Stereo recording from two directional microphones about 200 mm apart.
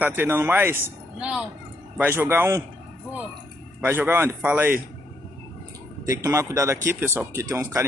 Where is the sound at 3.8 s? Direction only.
10° right (ahead or behind).